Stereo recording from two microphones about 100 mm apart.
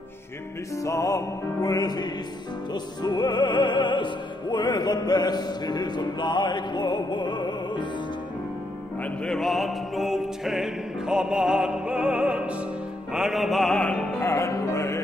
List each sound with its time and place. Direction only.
0.8 s music: 30° left (ahead or behind); by 7.8 s 50° left (ahead or behind)
9.0 s music: 5° left (ahead or behind)
13.8 s music: 15° left (ahead or behind)
14.2 s music: 30° left (ahead or behind)